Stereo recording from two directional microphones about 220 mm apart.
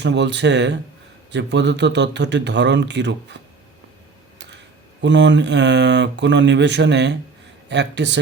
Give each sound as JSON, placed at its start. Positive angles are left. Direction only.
{"t": 0.0, "sound": "a man's voice", "side_deg": -55}
{"t": 4.4, "sound": "a man's voice", "side_deg": -55}